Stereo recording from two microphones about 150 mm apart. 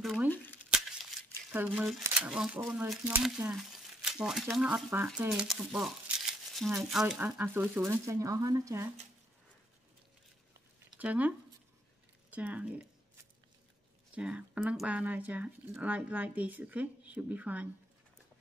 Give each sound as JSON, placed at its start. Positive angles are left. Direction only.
{"t": 1.5, "sound": "speech", "side_deg": -10}
{"t": 7.2, "sound": "speech", "side_deg": -15}
{"t": 11.0, "sound": "speech", "side_deg": -10}
{"t": 14.1, "sound": "speech", "side_deg": -10}